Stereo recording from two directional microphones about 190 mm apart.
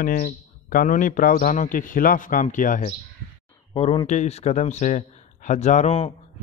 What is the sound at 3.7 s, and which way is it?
A man's voice, 25° left (ahead or behind).